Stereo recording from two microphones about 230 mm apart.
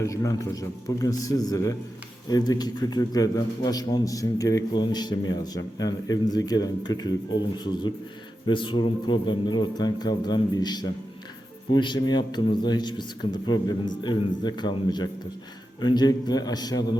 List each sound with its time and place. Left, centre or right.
0.0 s a man's voice: centre